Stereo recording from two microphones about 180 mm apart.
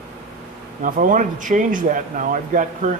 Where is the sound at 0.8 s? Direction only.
50° right (ahead or behind).